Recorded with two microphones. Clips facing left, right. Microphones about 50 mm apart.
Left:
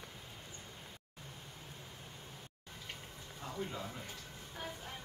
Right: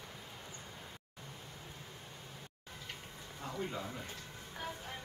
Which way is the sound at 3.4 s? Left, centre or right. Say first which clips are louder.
Right 2 dB; centre.